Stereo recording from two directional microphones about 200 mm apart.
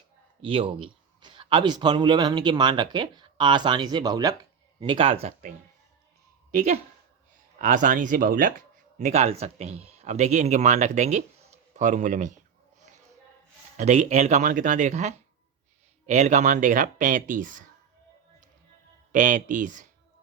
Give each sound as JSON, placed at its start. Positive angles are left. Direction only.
{"t": 0.4, "sound": "a man's voice", "side_deg": -25}
{"t": 6.5, "sound": "speech", "side_deg": -35}
{"t": 13.7, "sound": "speech", "side_deg": -35}
{"t": 19.1, "sound": "speech", "side_deg": -40}